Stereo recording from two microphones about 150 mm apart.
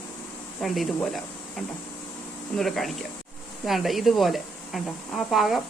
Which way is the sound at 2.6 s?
Centre (ahead or behind).